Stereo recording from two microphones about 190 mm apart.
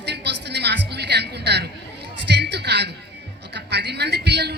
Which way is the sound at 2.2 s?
60° right (ahead or behind).